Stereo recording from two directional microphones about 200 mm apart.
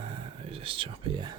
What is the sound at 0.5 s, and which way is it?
Speech, 25° right (ahead or behind).